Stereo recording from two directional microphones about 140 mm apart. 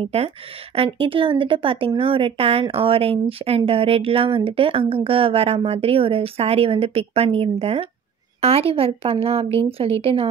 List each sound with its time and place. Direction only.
0.0 s speech: 45° right (ahead or behind)